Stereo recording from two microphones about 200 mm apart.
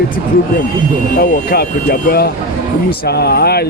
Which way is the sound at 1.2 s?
50° left (ahead or behind).